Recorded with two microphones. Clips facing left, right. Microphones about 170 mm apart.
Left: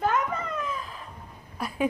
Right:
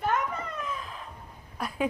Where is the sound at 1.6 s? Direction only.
5° left (ahead or behind).